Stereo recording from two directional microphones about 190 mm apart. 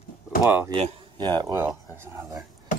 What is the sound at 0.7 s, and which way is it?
Speech, 20° right (ahead or behind).